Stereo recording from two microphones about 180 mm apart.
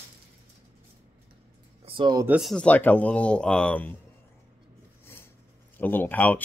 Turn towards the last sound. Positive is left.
turn(degrees=10)  # may be behind; listen again after turning